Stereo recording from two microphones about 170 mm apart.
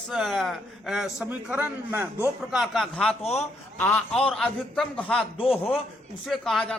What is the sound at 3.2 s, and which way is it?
Speech, 40° left (ahead or behind).